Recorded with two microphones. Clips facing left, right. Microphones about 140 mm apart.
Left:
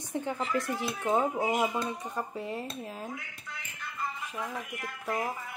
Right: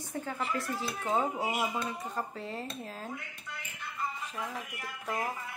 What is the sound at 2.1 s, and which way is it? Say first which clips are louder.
Speech: left 2 dB; 15° left (ahead or behind).